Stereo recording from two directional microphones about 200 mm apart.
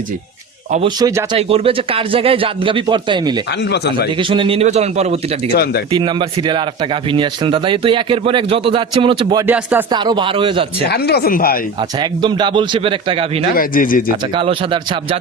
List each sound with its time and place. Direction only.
0.9 s a man's voice: 20° right (ahead or behind)
1.4 s a man's voice: 30° right (ahead or behind)
3.6 s speech: 55° left (ahead or behind)
4.2 s a man's voice: 25° right (ahead or behind)
9.5 s speech: 10° right (ahead or behind)
9.9 s a man's voice: 20° right (ahead or behind)
10.8 s speech: 55° left (ahead or behind)
11.8 s a man's voice: 25° right (ahead or behind)
13.6 s speech: 45° left (ahead or behind)
14.3 s a man's voice: 25° right (ahead or behind)